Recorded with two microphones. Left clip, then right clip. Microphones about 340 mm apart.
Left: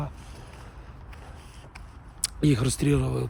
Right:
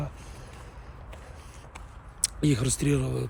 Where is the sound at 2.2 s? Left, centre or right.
Centre.